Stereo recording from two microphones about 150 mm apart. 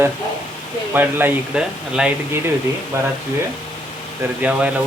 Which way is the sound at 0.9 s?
10° right (ahead or behind).